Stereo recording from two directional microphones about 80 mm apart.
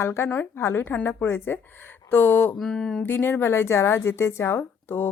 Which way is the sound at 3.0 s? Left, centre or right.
Left.